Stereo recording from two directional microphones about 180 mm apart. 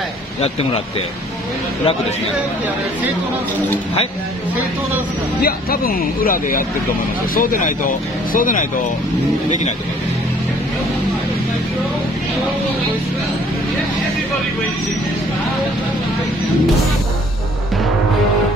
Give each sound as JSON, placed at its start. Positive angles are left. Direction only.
{"t": 5.4, "sound": "speech", "side_deg": 55}